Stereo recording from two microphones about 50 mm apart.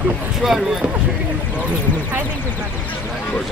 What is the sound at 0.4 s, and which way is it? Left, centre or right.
Speech, centre.